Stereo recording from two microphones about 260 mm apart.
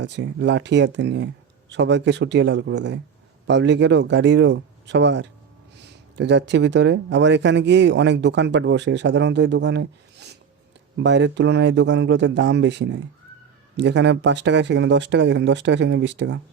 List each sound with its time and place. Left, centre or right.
0.0 s speech: right